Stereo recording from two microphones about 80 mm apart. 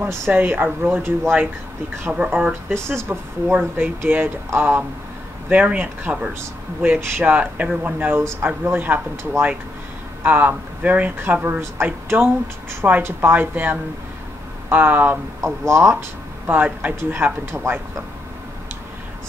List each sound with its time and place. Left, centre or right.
0.3 s speech: right
2.9 s speech: right
15.4 s speech: right
16.4 s speech: right